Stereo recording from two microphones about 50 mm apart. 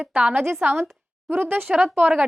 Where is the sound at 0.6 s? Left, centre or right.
Right.